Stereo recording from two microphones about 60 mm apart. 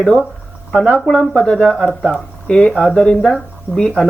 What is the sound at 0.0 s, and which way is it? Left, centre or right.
Speech, centre.